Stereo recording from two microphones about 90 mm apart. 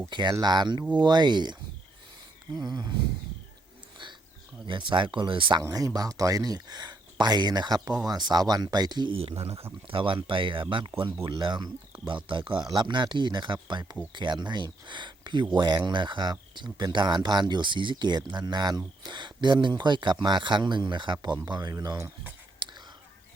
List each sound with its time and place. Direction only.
0.1 s speech: 60° right (ahead or behind)
2.6 s speech: 50° right (ahead or behind)
4.0 s a sound: 60° right (ahead or behind)
4.6 s speech: 65° right (ahead or behind)
5.6 s speech: 40° right (ahead or behind)
9.1 s speech: 90° right
9.8 s speech: 75° right (ahead or behind)
12.6 s speech: 55° right (ahead or behind); by 22.1 s 40° right (ahead or behind)
22.6 s whispering: 60° right (ahead or behind)